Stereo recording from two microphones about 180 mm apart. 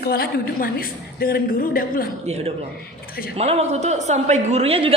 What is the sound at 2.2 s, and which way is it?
A woman's voice, 35° right (ahead or behind).